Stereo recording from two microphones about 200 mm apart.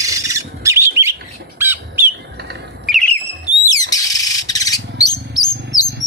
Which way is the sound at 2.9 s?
5° left (ahead or behind).